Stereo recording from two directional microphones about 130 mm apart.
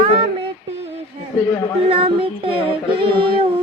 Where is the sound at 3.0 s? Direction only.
40° right (ahead or behind).